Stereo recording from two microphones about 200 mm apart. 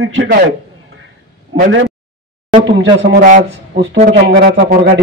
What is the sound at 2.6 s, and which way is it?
Speech, 60° right (ahead or behind).